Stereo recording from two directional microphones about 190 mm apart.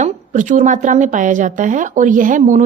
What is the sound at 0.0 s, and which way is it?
A woman's voice, 40° right (ahead or behind).